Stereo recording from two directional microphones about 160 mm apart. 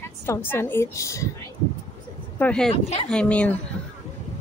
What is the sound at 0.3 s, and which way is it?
Speech, 15° left (ahead or behind).